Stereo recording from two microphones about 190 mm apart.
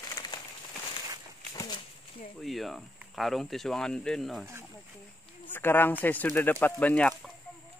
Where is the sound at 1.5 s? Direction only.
25° left (ahead or behind).